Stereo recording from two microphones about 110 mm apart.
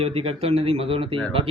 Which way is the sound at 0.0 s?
60° right (ahead or behind).